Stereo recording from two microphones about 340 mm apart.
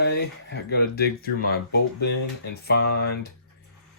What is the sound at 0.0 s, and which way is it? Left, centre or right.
Speech, left.